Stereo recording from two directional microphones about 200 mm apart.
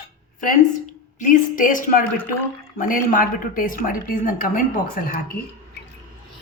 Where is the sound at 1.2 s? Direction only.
40° left (ahead or behind).